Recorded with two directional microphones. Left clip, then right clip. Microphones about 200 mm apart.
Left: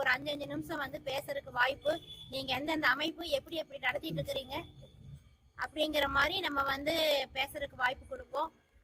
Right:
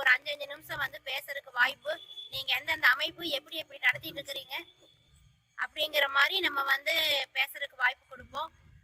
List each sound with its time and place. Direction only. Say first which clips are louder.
0.0 s a woman's voice: right 5 dB; 20° right (ahead or behind)